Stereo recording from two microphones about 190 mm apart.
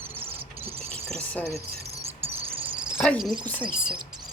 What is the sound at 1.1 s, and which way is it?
Cricket, 10° left (ahead or behind).